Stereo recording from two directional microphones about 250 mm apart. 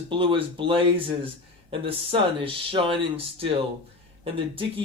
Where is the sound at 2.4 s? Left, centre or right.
Right.